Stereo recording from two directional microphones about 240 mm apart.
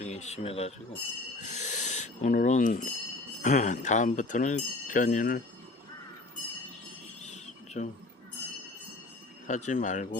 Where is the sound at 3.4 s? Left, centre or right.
Left.